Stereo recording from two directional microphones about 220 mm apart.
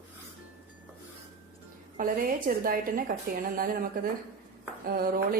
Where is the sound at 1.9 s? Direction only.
40° right (ahead or behind).